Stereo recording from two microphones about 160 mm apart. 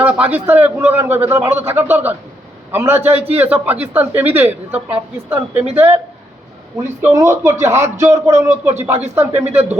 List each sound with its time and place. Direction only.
0.0 s a woman's voice: 10° right (ahead or behind)